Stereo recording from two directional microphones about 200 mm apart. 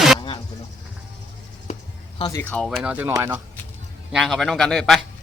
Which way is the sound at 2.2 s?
20° left (ahead or behind).